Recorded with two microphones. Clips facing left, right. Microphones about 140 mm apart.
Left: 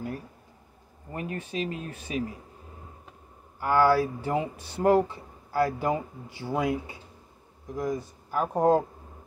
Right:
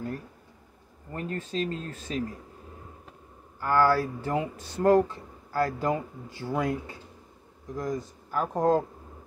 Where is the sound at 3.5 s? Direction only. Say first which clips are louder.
Left 1 dB; 15° left (ahead or behind).